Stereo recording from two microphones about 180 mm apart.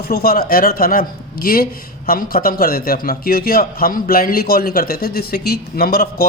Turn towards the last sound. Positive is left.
turn(degrees=60)  # may be behind; listen again after turning